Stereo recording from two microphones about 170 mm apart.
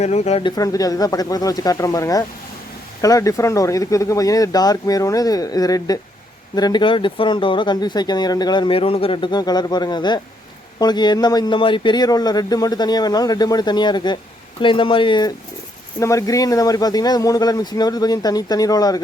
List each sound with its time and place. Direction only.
0.0 s speech: 40° left (ahead or behind)
0.4 s speech: 20° left (ahead or behind)
16.0 s speech: 20° left (ahead or behind)